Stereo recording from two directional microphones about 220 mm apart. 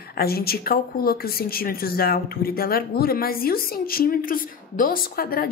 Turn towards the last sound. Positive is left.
turn(degrees=40)  # may be behind; listen again after turning